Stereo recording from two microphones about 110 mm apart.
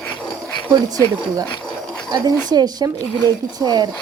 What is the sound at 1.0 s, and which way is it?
Speech, 25° left (ahead or behind).